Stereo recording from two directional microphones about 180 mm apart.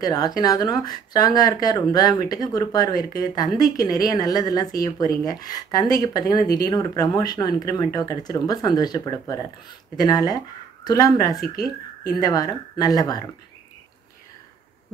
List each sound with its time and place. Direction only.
0.0 s speech: 20° left (ahead or behind)